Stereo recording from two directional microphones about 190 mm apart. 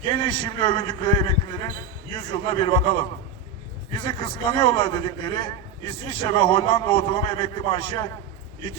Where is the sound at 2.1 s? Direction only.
25° left (ahead or behind).